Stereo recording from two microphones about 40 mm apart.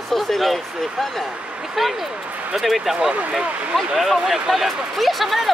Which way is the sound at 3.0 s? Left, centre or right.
Centre.